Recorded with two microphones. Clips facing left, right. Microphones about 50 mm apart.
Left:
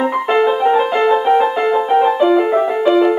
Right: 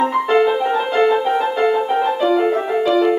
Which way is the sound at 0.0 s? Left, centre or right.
Centre.